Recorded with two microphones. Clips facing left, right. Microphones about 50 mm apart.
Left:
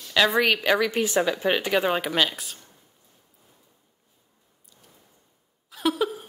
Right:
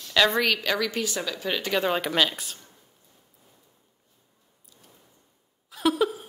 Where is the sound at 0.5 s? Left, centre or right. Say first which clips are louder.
Left 4 dB; centre.